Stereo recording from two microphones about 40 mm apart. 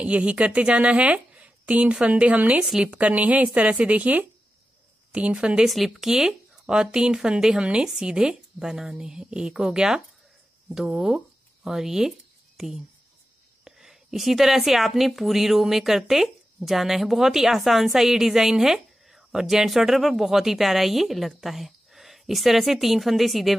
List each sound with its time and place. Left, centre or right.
0.0 s a woman's voice: right
5.1 s speech: right
5.7 s a woman's voice: centre
6.6 s a woman's voice: centre